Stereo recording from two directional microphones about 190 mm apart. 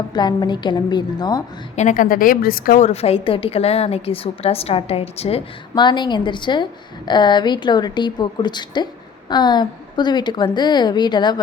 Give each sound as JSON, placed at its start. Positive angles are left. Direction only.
{"t": 0.1, "sound": "a woman's voice", "side_deg": 20}
{"t": 1.7, "sound": "a woman's voice", "side_deg": 40}
{"t": 2.8, "sound": "a woman's voice", "side_deg": 30}